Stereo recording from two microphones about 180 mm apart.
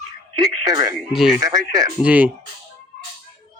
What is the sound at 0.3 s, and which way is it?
Speech, 20° right (ahead or behind).